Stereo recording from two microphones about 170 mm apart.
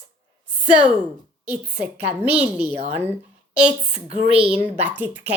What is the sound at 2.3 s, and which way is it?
Speech, 10° right (ahead or behind).